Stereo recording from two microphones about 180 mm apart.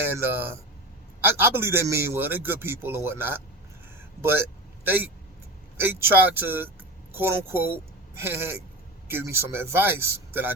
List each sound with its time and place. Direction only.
0.2 s a man's voice: 15° right (ahead or behind)
4.9 s a man's voice: 10° right (ahead or behind)